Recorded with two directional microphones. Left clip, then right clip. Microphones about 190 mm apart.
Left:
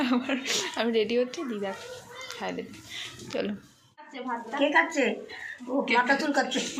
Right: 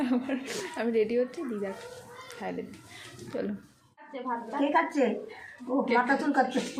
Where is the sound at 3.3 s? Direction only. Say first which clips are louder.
Left 2 dB; 5° right (ahead or behind).